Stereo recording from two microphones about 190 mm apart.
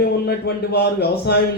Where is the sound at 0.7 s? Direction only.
60° left (ahead or behind).